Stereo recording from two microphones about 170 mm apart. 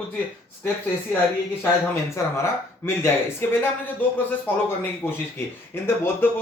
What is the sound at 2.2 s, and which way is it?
Speech, 15° left (ahead or behind).